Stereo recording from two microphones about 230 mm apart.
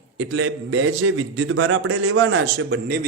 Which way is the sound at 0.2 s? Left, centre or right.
Right.